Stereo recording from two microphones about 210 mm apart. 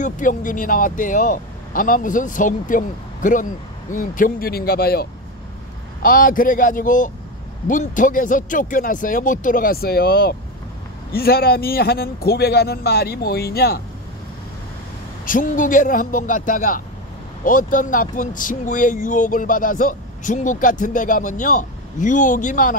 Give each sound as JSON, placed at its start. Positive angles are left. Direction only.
{"t": 0.0, "sound": "a man's voice", "side_deg": 40}
{"t": 6.0, "sound": "a man's voice", "side_deg": 40}
{"t": 15.2, "sound": "speech", "side_deg": 40}